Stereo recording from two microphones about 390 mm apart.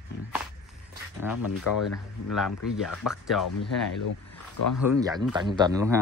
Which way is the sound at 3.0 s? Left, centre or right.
Centre.